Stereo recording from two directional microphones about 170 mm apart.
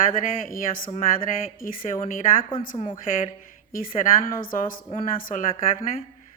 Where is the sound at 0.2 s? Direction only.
55° left (ahead or behind).